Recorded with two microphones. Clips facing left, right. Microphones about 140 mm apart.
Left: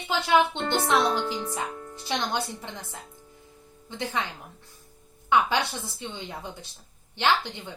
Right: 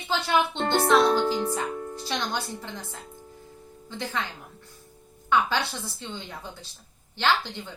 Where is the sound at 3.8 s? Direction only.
20° left (ahead or behind).